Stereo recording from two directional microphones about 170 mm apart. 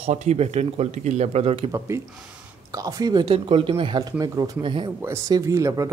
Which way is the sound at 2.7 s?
20° right (ahead or behind).